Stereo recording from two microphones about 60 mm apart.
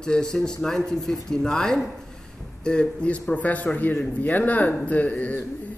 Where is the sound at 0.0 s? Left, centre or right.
Centre.